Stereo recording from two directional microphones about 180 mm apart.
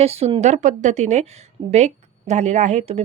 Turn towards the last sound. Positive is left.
turn(degrees=-40)  # may be behind; listen again after turning